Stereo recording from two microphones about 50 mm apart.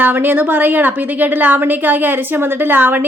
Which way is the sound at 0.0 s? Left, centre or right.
Right.